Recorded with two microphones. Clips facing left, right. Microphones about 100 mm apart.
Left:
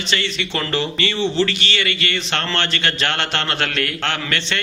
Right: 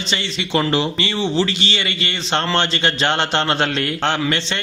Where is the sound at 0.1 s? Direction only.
20° right (ahead or behind).